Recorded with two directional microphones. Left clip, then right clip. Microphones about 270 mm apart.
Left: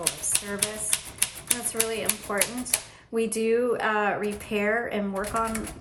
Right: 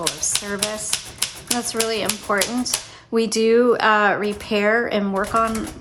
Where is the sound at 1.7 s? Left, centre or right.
Centre.